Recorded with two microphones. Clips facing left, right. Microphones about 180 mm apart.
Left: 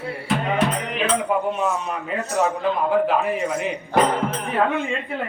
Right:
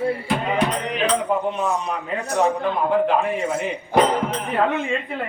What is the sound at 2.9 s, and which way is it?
Speech, 5° left (ahead or behind).